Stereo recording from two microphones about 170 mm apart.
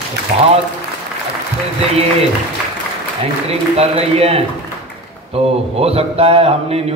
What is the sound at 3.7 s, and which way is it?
A man's voice, 35° right (ahead or behind).